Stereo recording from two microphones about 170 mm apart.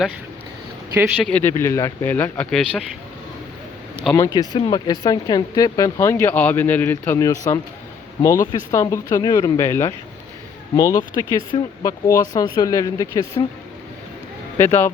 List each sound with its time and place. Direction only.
1.2 s speech: 10° left (ahead or behind)
4.2 s speech: 25° left (ahead or behind)
14.6 s speech: 15° left (ahead or behind)